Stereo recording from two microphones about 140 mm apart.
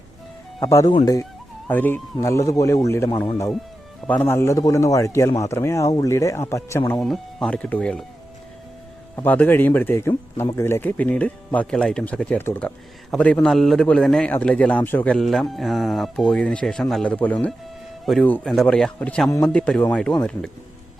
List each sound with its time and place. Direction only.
0.6 s a man's voice: 25° left (ahead or behind)
7.0 s a man's voice: 5° left (ahead or behind)
9.1 s a man's voice: 10° left (ahead or behind)
18.0 s a man's voice: centre (ahead or behind)